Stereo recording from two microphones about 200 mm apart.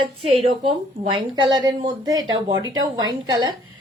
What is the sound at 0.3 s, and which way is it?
Speech, 30° right (ahead or behind).